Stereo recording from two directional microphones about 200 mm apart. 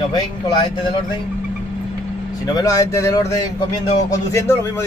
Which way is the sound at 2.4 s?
15° left (ahead or behind).